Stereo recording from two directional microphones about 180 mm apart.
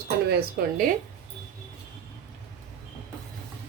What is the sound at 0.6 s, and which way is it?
Speech, 60° right (ahead or behind).